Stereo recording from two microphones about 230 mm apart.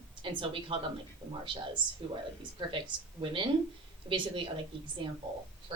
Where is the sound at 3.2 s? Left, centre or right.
Right.